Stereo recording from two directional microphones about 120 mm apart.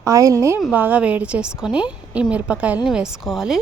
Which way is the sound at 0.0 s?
30° right (ahead or behind).